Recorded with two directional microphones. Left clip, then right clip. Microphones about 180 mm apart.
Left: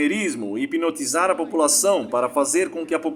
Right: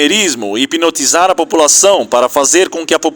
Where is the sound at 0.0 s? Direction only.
40° right (ahead or behind).